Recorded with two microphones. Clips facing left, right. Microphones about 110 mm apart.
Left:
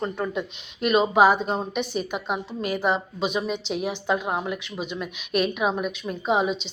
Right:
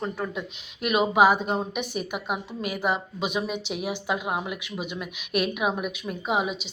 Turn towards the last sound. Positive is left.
turn(degrees=-5)  # may be behind; listen again after turning